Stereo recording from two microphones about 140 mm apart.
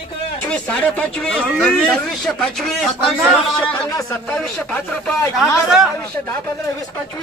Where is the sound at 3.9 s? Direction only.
20° left (ahead or behind).